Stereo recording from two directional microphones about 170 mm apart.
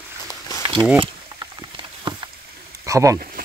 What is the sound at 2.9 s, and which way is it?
Speech, 20° right (ahead or behind).